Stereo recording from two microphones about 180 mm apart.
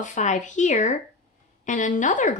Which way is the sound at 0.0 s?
45° left (ahead or behind).